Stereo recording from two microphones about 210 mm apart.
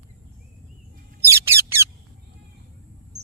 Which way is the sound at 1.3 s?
10° right (ahead or behind).